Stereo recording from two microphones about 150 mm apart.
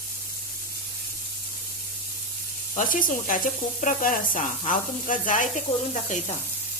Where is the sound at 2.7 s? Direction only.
60° left (ahead or behind).